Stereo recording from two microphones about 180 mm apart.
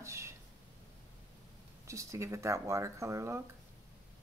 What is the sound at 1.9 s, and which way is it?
Speech, 15° right (ahead or behind).